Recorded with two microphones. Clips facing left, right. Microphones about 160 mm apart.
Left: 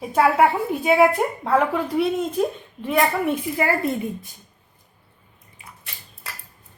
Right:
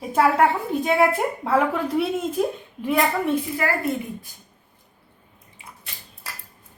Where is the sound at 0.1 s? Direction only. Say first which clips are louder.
Left 1 dB; 5° left (ahead or behind).